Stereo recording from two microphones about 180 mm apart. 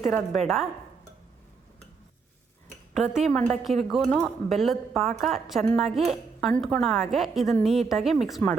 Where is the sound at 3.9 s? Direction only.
Centre (ahead or behind).